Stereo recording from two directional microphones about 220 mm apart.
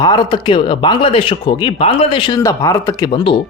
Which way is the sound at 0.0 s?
20° left (ahead or behind).